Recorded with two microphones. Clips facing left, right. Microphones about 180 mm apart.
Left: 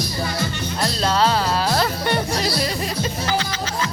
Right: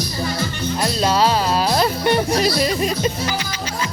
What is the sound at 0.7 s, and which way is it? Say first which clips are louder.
Music: right 2 dB; 15° right (ahead or behind).